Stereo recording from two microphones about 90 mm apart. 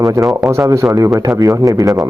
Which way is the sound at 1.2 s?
40° right (ahead or behind).